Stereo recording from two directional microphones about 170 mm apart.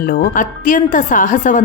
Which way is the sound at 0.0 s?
55° left (ahead or behind).